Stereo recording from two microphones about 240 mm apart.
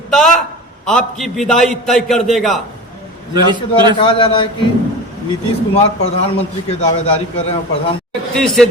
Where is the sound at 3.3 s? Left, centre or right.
Centre.